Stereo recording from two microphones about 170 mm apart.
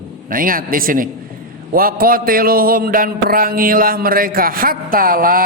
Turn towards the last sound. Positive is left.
turn(degrees=-55)  # may be behind; listen again after turning